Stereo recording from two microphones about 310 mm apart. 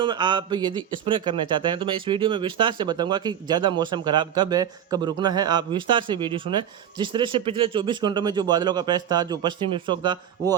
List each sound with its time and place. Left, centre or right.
0.0 s speech: centre